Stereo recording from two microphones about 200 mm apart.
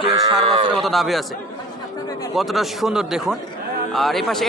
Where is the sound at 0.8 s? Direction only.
Centre (ahead or behind).